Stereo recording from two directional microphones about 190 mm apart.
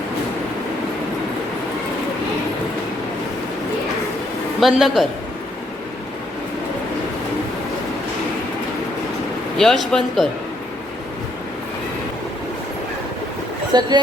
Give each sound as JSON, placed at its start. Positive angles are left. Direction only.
{"t": 4.6, "sound": "speech", "side_deg": 0}
{"t": 9.6, "sound": "speech", "side_deg": 0}
{"t": 13.7, "sound": "speech", "side_deg": -20}